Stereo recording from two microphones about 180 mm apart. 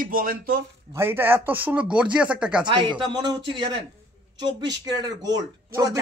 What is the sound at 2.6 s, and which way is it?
Speech, 25° right (ahead or behind).